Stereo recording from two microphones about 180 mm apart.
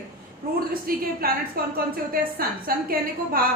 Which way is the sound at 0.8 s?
55° right (ahead or behind).